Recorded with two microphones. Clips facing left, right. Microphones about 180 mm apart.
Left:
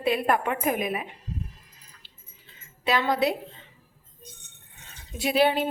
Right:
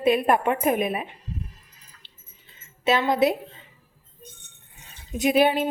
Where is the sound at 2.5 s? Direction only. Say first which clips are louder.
Right 3 dB; 20° right (ahead or behind).